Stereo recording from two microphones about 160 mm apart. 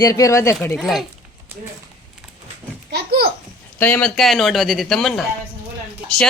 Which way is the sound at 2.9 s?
75° right (ahead or behind).